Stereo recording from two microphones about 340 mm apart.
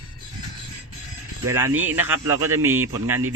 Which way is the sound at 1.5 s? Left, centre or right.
Centre.